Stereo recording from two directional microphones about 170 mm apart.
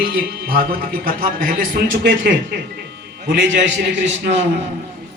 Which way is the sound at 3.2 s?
90° right.